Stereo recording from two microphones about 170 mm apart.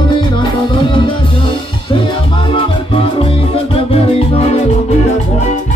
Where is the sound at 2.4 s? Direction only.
30° left (ahead or behind).